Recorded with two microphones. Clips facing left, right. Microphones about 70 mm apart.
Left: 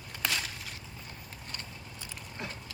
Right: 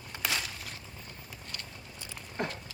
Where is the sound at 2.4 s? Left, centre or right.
Right.